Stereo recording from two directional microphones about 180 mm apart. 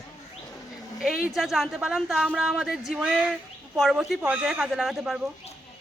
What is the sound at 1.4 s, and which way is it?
A man's voice, centre (ahead or behind).